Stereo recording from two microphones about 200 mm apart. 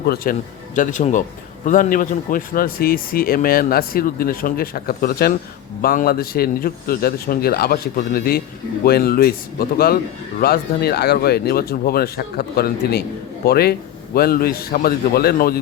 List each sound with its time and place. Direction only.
0.2 s speech: 45° left (ahead or behind)